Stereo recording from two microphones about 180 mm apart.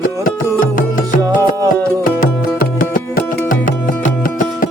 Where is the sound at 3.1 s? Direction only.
50° left (ahead or behind).